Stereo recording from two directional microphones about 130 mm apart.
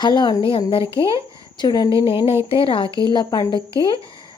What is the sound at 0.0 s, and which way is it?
Speech, 35° left (ahead or behind).